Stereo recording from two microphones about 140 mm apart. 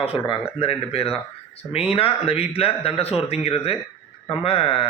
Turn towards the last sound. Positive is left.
turn(degrees=40)  # may be behind; listen again after turning